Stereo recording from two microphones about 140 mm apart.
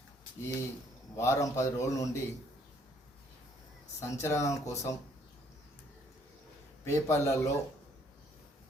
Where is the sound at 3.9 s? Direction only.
20° left (ahead or behind).